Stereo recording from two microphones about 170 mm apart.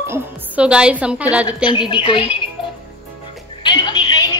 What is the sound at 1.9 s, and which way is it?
Speech, 30° left (ahead or behind).